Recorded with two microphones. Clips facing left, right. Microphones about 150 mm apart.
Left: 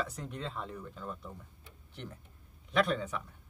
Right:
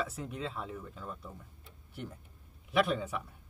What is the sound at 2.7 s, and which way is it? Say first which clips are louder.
Speech: even; 10° right (ahead or behind).